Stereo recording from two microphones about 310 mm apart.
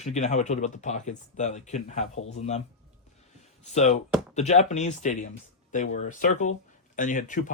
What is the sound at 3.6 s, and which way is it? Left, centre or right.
Speech, left.